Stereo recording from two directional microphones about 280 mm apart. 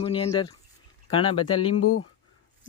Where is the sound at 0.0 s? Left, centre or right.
Centre.